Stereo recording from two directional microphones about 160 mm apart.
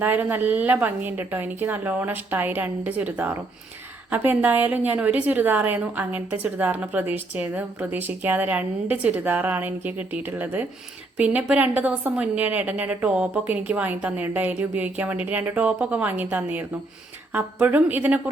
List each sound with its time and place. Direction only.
0.0 s a woman's voice: 10° right (ahead or behind)